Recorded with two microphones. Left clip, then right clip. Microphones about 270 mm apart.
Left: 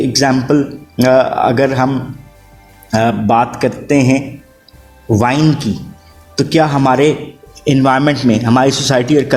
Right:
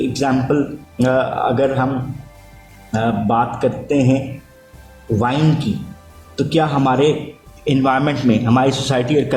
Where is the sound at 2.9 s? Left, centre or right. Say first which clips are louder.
Left 6 dB; left.